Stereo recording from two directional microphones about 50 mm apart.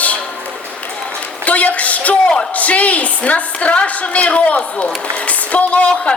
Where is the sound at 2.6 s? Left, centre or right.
Left.